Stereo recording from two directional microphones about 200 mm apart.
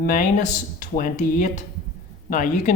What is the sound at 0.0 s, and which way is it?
Speech, 40° left (ahead or behind).